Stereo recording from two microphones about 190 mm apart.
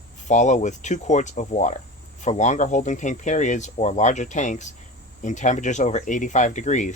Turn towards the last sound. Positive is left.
turn(degrees=40)  # may be behind; listen again after turning